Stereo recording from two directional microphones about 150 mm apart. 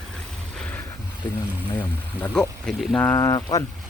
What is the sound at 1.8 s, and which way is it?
Speech, 10° left (ahead or behind).